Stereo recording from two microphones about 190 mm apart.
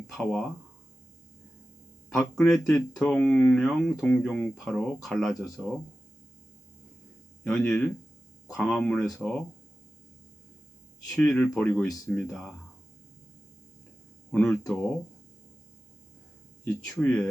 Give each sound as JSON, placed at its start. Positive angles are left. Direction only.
{"t": 0.1, "sound": "speech", "side_deg": 5}
{"t": 2.1, "sound": "speech", "side_deg": 0}
{"t": 7.4, "sound": "speech", "side_deg": 5}
{"t": 11.0, "sound": "speech", "side_deg": 0}
{"t": 14.3, "sound": "speech", "side_deg": 5}
{"t": 16.8, "sound": "speech", "side_deg": 5}